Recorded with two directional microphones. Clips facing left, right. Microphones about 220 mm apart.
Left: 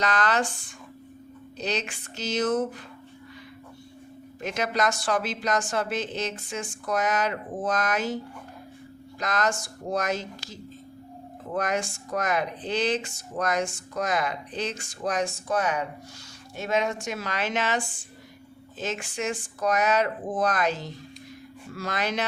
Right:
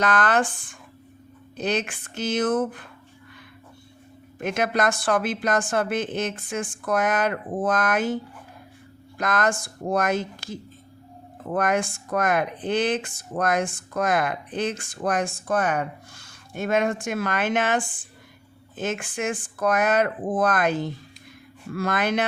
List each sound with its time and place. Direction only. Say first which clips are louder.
0.0 s speech: right 3 dB; 55° right (ahead or behind)
4.4 s speech: right 3 dB; 55° right (ahead or behind)